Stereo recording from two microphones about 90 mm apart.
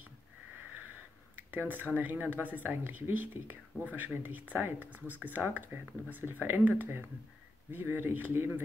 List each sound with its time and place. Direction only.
1.5 s speech: 20° right (ahead or behind)